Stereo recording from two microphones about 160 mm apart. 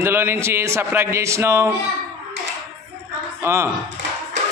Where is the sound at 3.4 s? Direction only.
15° right (ahead or behind).